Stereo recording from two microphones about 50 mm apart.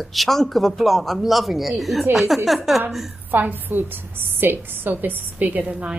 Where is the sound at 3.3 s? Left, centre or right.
Right.